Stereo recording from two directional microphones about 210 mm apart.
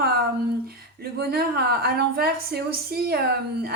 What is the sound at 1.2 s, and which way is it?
A woman's voice, 45° right (ahead or behind).